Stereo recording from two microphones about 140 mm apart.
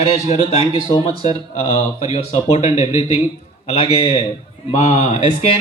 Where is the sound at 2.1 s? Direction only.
50° left (ahead or behind).